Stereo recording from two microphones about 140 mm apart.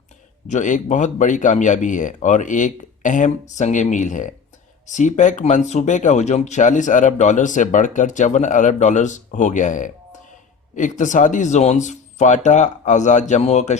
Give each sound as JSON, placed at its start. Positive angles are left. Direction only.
{"t": 0.4, "sound": "speech", "side_deg": 60}